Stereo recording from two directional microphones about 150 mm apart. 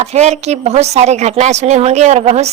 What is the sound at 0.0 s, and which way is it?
A woman's voice, 45° right (ahead or behind).